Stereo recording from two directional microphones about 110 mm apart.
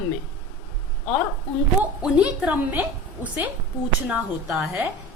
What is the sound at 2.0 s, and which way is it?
Speech, 10° right (ahead or behind).